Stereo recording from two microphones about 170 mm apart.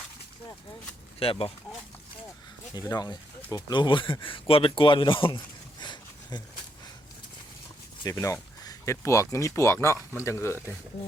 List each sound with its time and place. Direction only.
1.2 s speech: 35° left (ahead or behind)
2.7 s speech: 20° left (ahead or behind)
5.8 s a sound: 25° left (ahead or behind)
8.2 s speech: 20° left (ahead or behind)